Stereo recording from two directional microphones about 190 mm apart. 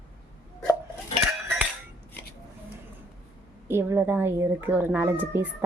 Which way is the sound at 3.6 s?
10° right (ahead or behind).